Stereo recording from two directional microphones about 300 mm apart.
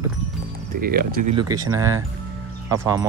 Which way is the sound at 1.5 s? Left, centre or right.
Centre.